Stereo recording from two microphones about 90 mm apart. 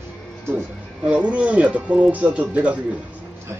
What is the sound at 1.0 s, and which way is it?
Speech, 15° right (ahead or behind).